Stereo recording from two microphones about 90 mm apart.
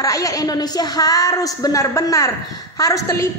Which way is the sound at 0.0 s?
40° left (ahead or behind).